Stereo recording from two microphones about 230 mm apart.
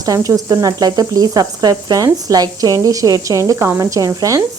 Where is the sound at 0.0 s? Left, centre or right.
Centre.